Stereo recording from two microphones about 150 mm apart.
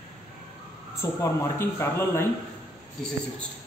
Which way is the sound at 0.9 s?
20° left (ahead or behind).